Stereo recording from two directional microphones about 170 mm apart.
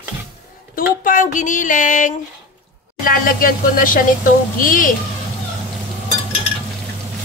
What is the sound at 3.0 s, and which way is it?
Speech, 55° left (ahead or behind).